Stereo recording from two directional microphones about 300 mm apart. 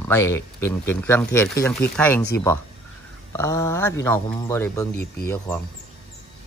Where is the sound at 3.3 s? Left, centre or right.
Centre.